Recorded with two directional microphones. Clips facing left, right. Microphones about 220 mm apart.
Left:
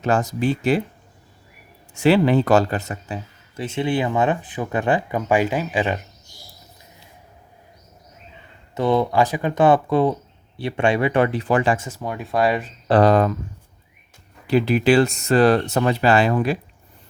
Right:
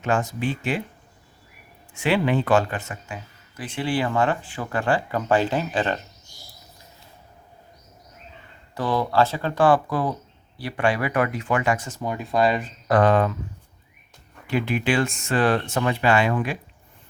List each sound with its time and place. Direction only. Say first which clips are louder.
0.0 s speech: left 4 dB; 40° left (ahead or behind)
1.9 s speech: left 6 dB; 40° left (ahead or behind); by 6.0 s 10° left (ahead or behind)
8.7 s speech: left 4 dB; 20° left (ahead or behind)
11.9 s speech: even; centre (ahead or behind)
12.9 s speech: left 3 dB; 35° left (ahead or behind)
14.4 s speech: left 6 dB; 35° left (ahead or behind)